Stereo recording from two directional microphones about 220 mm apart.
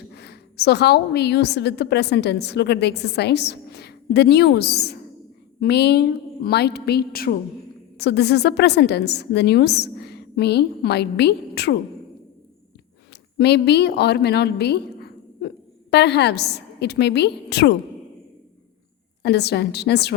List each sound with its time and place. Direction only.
0.1 s a woman's voice: 50° left (ahead or behind)
13.4 s a woman's voice: 50° left (ahead or behind)
19.2 s a woman's voice: 50° left (ahead or behind)